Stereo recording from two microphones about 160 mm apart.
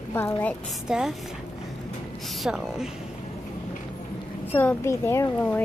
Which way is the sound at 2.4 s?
5° right (ahead or behind).